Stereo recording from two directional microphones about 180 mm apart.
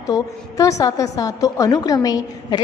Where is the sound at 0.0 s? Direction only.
20° left (ahead or behind).